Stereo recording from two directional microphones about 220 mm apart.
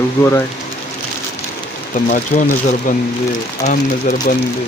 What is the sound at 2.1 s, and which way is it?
Speech, 35° left (ahead or behind).